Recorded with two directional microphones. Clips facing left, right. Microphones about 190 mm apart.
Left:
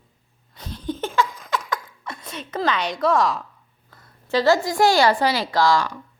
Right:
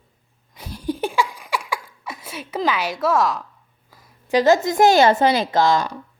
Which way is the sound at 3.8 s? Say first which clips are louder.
Right 3 dB; 10° right (ahead or behind).